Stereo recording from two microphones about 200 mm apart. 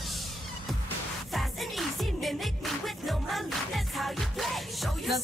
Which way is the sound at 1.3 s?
Centre (ahead or behind).